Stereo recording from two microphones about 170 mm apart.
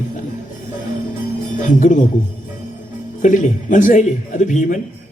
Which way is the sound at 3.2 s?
50° left (ahead or behind).